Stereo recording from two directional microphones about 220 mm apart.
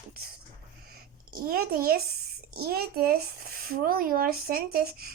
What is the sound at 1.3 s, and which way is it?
Speech, 40° right (ahead or behind).